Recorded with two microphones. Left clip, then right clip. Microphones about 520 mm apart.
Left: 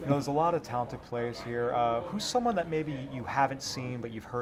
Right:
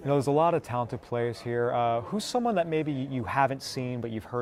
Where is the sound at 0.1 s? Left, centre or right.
Right.